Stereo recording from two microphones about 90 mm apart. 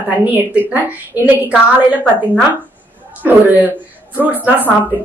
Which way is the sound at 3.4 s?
20° right (ahead or behind).